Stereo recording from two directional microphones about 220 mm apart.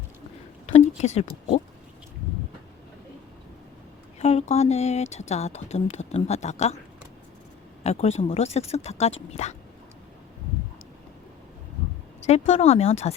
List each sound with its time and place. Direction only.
0.7 s speech: 30° left (ahead or behind)
4.2 s speech: 30° left (ahead or behind)
7.9 s speech: 30° left (ahead or behind)
12.5 s speech: 30° left (ahead or behind)